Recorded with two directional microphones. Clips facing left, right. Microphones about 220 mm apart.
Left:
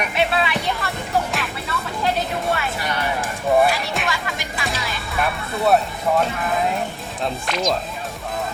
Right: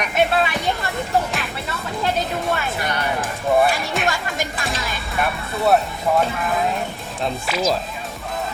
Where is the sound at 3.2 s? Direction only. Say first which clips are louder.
Left 1 dB; centre (ahead or behind).